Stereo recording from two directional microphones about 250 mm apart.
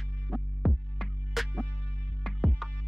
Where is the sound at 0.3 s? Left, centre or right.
Centre.